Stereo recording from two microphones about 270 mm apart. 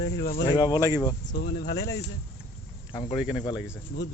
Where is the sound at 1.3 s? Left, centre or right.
Left.